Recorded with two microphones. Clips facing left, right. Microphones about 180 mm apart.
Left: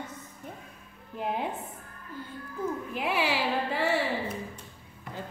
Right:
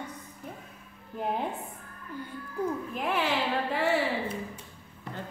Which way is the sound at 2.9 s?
5° left (ahead or behind).